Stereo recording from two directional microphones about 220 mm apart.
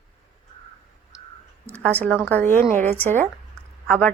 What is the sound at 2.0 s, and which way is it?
A woman's voice, 5° left (ahead or behind).